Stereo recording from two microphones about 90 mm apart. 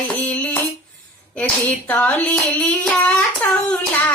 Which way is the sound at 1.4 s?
15° left (ahead or behind).